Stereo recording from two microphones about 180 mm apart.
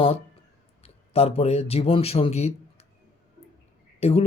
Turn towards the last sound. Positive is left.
turn(degrees=35)  # may be behind; listen again after turning